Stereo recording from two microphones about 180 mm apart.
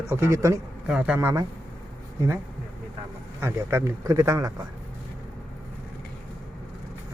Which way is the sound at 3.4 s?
15° right (ahead or behind).